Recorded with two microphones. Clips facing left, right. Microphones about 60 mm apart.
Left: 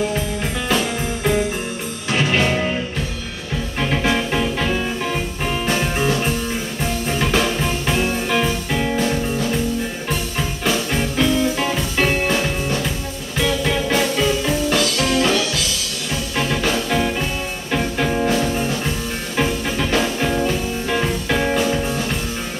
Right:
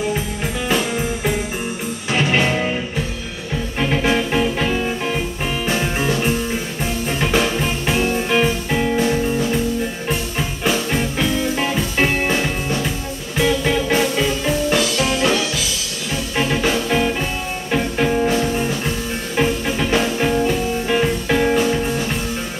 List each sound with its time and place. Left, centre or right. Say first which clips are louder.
0.7 s music: right 1 dB; centre
3.8 s music: right 2 dB; centre
10.6 s music: right 1 dB; centre